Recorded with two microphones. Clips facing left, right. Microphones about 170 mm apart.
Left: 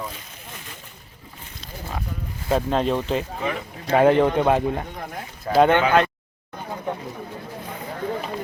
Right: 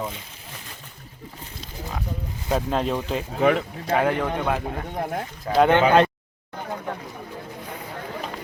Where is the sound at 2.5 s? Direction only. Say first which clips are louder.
Left 2 dB; centre (ahead or behind).